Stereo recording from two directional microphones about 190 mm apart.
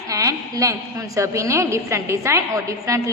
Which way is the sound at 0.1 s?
15° right (ahead or behind).